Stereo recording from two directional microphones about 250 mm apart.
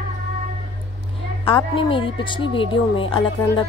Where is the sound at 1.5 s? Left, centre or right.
Centre.